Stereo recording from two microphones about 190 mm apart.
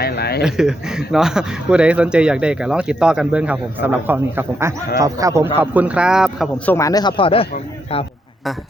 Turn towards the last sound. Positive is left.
turn(degrees=30)  # may be behind; listen again after turning